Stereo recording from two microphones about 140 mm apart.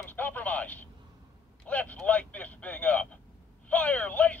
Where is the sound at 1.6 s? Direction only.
10° left (ahead or behind).